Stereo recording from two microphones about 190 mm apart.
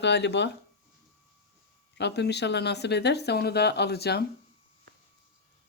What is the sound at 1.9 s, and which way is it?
Speech, 65° left (ahead or behind).